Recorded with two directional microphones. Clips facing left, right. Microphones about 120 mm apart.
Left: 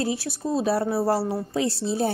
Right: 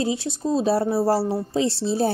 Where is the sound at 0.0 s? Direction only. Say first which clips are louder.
Right 2 dB; 20° right (ahead or behind).